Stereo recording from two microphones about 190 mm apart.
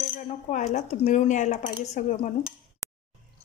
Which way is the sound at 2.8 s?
15° left (ahead or behind).